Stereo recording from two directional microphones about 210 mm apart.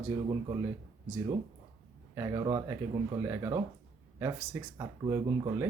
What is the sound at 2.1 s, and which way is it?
Speech, 15° right (ahead or behind).